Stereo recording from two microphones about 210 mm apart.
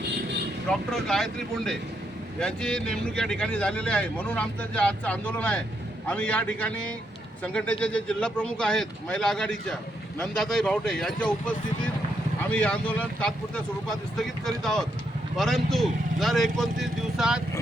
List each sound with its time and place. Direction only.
0.7 s speech: centre (ahead or behind)